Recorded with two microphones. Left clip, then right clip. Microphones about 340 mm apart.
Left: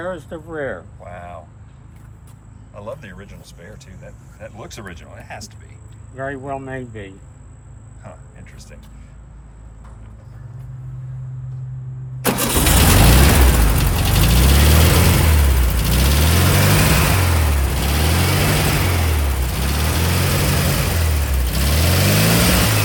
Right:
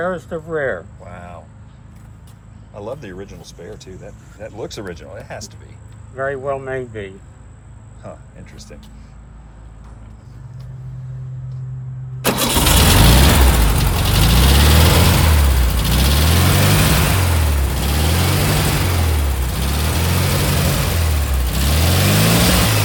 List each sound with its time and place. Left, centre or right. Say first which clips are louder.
0.0 s speech: right 5 dB; right
1.0 s vehicle: left 2 dB; centre
2.7 s speech: right 3 dB; centre
6.1 s speech: right 5 dB; right
8.0 s speech: right 5 dB; centre
12.2 s vehicle: right 2 dB; centre